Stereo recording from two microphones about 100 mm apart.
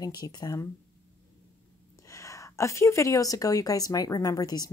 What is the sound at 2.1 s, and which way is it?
Speech, 30° left (ahead or behind).